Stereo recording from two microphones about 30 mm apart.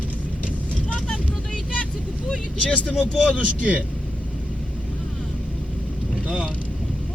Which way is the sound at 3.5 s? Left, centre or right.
Right.